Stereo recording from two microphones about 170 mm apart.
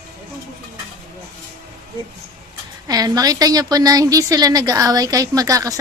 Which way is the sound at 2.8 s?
20° right (ahead or behind).